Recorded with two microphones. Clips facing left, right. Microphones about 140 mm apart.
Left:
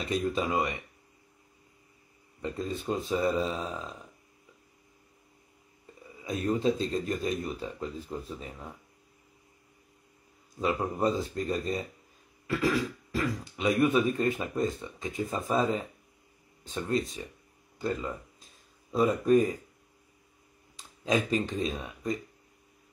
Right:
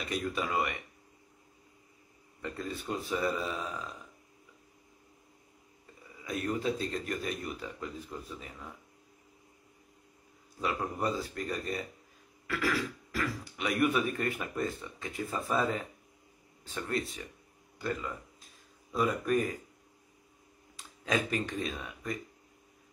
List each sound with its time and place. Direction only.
0.0 s speech: 25° left (ahead or behind)
2.4 s speech: 20° left (ahead or behind)
6.2 s speech: 25° left (ahead or behind)
10.6 s speech: 25° left (ahead or behind)
12.4 s a sound: 25° left (ahead or behind)
13.4 s speech: 20° left (ahead or behind)
20.7 s speech: 20° left (ahead or behind)